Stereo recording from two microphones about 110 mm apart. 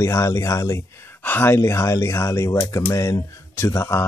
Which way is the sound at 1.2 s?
20° left (ahead or behind).